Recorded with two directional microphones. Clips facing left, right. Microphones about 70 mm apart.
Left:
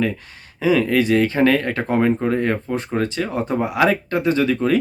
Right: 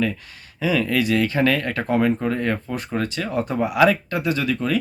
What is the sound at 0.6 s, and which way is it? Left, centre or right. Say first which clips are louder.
Speech: left 4 dB; left.